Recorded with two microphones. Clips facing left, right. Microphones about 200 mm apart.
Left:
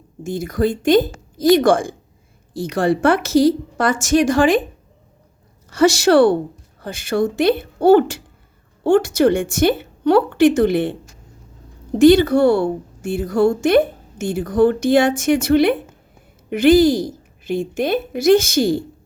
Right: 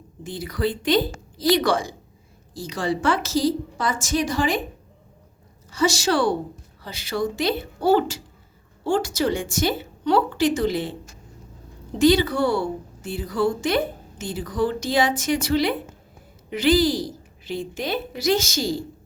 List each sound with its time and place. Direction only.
0.2 s a woman's voice: 45° left (ahead or behind); by 4.4 s 80° left
5.7 s a woman's voice: 65° left (ahead or behind)